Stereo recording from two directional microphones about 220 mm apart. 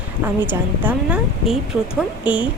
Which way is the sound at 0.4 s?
10° right (ahead or behind).